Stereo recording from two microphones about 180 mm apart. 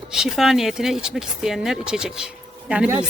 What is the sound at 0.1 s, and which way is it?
Speech, 5° right (ahead or behind).